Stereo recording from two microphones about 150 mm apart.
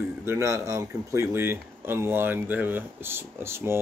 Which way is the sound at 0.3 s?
20° right (ahead or behind).